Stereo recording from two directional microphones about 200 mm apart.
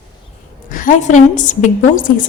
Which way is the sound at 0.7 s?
40° left (ahead or behind).